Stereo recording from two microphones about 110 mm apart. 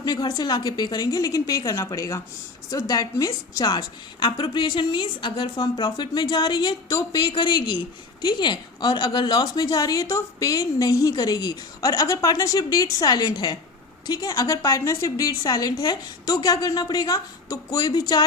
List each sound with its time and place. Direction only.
0.0 s a woman's voice: 40° left (ahead or behind)
7.2 s a woman's voice: 45° left (ahead or behind)